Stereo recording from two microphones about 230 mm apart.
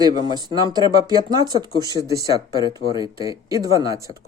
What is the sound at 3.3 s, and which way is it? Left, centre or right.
Speech, centre.